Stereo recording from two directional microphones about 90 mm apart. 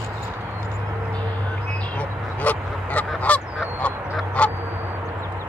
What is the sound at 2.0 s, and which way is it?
Duck, 20° left (ahead or behind).